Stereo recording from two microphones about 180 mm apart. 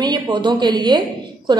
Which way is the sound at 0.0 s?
25° right (ahead or behind).